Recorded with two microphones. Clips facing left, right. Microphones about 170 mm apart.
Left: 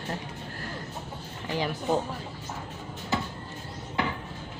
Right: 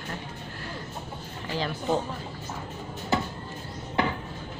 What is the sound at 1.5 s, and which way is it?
Speech, 10° left (ahead or behind).